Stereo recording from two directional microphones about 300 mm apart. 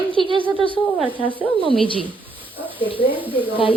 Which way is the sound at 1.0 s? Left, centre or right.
Centre.